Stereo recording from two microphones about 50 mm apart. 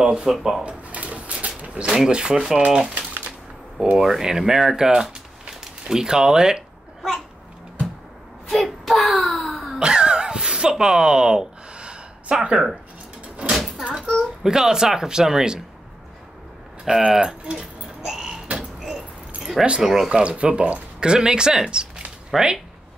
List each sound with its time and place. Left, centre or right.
0.0 s speech: centre
0.7 s a sound: right
1.9 s speech: centre
4.0 s speech: centre
7.0 s babbling: centre
8.5 s speech: centre
9.8 s a sound: centre
13.5 s door: centre
14.4 s speech: centre
16.8 s speech: centre
18.8 s keys jangling: centre
19.8 s speech: centre
20.1 s speech: right